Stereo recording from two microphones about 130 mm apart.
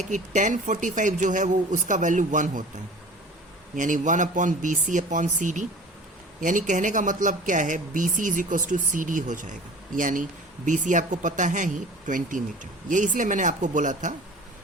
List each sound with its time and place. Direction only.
0.0 s speech: 70° right (ahead or behind)
3.8 s speech: 75° right (ahead or behind)
6.4 s speech: 85° right
10.7 s speech: 75° right (ahead or behind)